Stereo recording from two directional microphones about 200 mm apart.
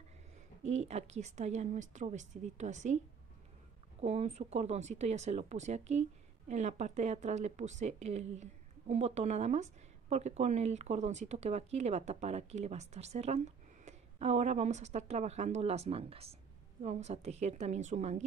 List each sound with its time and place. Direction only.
0.7 s speech: 35° right (ahead or behind)
4.0 s speech: 35° right (ahead or behind)